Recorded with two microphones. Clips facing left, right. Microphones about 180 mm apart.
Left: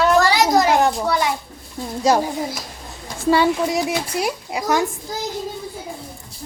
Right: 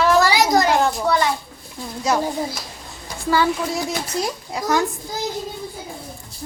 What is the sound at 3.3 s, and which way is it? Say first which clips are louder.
Speech: left 3 dB; 20° left (ahead or behind).